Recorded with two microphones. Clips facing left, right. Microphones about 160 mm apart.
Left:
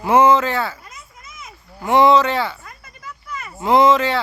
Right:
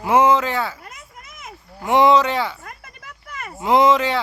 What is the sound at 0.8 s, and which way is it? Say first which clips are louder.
Children playing: right 1 dB; 60° right (ahead or behind).